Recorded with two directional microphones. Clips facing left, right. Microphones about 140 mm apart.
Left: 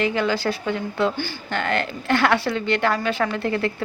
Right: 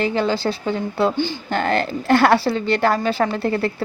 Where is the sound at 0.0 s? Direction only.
30° right (ahead or behind).